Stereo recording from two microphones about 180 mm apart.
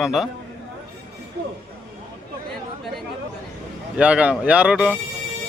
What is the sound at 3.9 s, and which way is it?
Speech, 5° right (ahead or behind).